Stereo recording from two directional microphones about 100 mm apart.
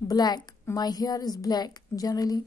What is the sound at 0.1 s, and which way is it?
A woman's voice, 45° left (ahead or behind).